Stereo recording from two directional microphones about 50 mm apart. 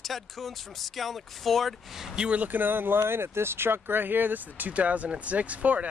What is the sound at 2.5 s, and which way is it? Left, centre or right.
Speech, right.